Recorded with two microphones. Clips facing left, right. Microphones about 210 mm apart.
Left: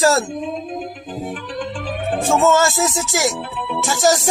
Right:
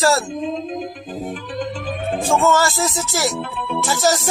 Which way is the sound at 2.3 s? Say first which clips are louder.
Left 2 dB; 20° left (ahead or behind).